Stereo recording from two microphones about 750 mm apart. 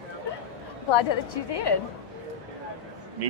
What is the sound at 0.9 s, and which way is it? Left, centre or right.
Speech, left.